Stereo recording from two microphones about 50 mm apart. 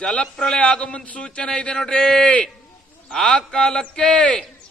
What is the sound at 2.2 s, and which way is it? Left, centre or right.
A man's voice, left.